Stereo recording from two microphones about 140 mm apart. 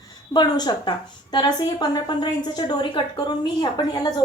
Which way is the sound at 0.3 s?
30° left (ahead or behind).